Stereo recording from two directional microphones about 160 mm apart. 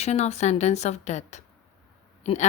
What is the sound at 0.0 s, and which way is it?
A woman's voice, 45° left (ahead or behind).